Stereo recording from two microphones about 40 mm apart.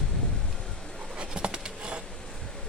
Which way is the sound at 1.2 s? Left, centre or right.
Right.